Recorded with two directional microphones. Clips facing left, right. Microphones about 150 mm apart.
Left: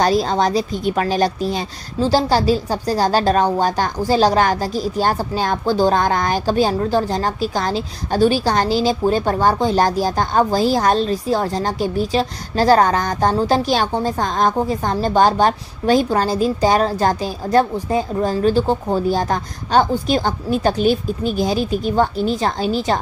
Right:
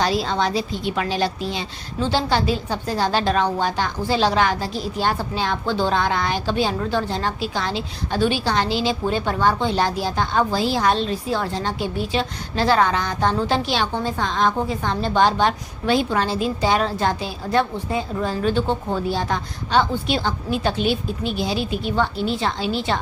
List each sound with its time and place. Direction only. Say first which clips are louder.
0.0 s a woman's voice: left 5 dB; 40° left (ahead or behind)